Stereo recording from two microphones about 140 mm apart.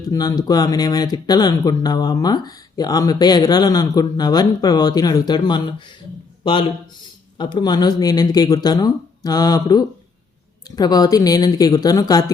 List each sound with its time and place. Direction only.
0.1 s a man's voice: 30° left (ahead or behind)